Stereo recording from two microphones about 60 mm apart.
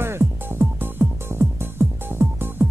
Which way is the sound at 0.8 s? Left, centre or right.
Right.